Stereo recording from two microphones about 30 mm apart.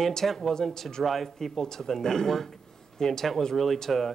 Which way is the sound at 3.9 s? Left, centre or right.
Centre.